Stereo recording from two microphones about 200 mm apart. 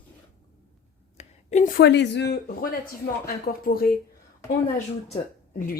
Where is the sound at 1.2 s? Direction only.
35° left (ahead or behind).